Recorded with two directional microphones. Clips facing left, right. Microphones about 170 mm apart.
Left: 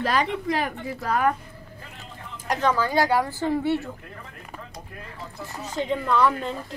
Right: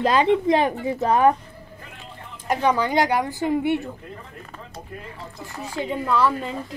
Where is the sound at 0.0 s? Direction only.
20° right (ahead or behind).